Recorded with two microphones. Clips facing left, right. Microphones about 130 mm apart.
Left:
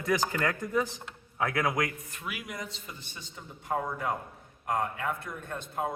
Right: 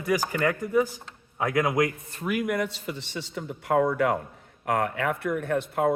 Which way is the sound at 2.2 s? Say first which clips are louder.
Right 13 dB; 50° right (ahead or behind).